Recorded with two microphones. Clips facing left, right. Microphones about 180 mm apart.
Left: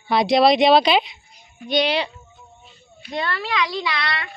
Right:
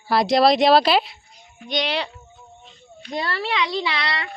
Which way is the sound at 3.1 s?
35° right (ahead or behind).